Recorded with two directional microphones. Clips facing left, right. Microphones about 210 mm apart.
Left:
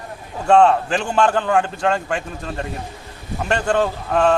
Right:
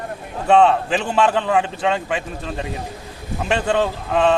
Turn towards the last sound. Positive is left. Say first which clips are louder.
# even
turn(degrees=0)  # may be behind; listen again after turning